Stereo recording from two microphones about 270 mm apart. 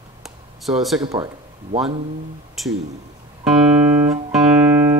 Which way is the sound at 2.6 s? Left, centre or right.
Centre.